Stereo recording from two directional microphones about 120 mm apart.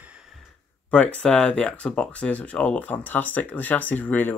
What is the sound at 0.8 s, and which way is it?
Speech, 10° left (ahead or behind).